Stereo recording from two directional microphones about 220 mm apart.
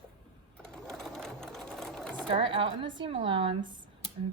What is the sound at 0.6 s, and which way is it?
Sewing machine, 5° left (ahead or behind).